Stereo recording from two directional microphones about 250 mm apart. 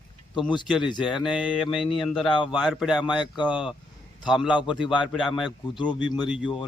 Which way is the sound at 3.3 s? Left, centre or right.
Centre.